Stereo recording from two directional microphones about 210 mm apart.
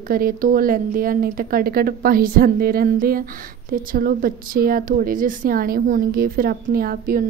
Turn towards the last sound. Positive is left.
turn(degrees=-45)  # may be behind; listen again after turning